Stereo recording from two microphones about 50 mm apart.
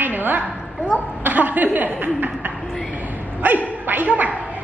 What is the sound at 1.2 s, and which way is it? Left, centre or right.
Chuckle, right.